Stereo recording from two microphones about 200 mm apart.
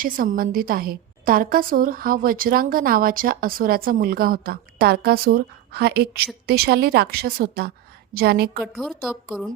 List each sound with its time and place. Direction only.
0.0 s a woman's voice: 45° right (ahead or behind)
8.6 s a woman's voice: centre (ahead or behind)